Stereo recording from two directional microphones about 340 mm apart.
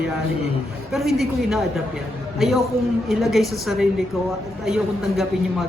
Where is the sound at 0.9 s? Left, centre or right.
Centre.